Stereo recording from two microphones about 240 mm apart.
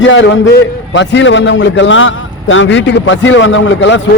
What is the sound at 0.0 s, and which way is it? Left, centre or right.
A man's voice, left.